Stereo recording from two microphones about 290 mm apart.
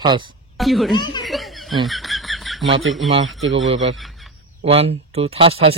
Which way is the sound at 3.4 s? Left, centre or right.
Right.